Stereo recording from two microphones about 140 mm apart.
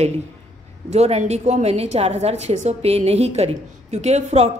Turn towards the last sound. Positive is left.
turn(degrees=-50)  # may be behind; listen again after turning